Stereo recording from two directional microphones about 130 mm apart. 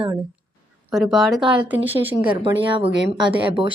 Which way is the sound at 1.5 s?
15° right (ahead or behind).